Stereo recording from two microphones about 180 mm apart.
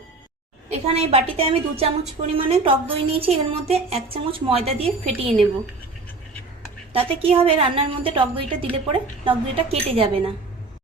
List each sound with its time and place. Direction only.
0.7 s a woman's voice: 35° right (ahead or behind)
6.9 s a woman's voice: 30° right (ahead or behind)